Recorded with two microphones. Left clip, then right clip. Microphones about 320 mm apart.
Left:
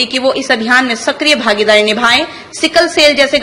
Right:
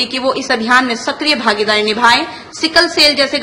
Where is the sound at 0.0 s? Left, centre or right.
Centre.